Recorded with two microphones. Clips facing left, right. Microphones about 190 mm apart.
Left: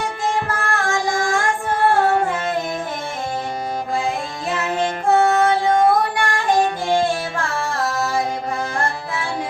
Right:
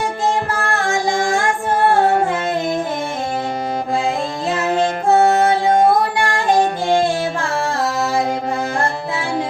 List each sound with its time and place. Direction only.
0.3 s music: 30° right (ahead or behind)
5.1 s music: 30° right (ahead or behind)